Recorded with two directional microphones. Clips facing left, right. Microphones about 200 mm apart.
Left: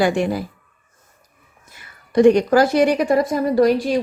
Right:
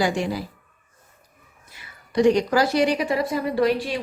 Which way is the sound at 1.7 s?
55° left (ahead or behind).